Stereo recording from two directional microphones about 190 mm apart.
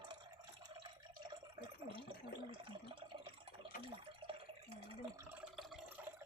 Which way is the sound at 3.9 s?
30° right (ahead or behind).